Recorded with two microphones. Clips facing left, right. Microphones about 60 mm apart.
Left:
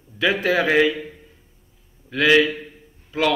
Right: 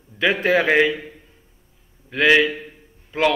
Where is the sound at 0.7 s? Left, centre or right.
Centre.